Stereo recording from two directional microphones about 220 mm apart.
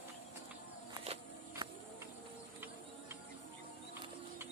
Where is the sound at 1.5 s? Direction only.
15° right (ahead or behind).